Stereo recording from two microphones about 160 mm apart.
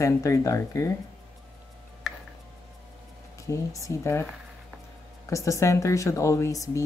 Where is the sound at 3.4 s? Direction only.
20° left (ahead or behind).